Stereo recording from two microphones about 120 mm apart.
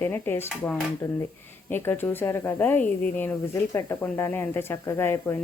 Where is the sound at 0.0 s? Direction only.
20° left (ahead or behind).